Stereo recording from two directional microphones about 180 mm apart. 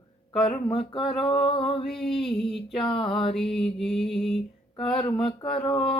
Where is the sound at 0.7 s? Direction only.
30° left (ahead or behind).